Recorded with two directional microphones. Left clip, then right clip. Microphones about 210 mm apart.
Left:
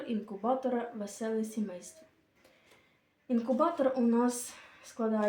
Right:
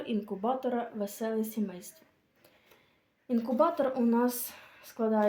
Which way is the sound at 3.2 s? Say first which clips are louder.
Right 2 dB; 50° right (ahead or behind).